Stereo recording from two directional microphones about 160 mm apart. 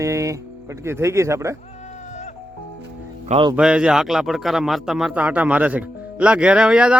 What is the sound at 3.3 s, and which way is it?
Speech, 30° right (ahead or behind).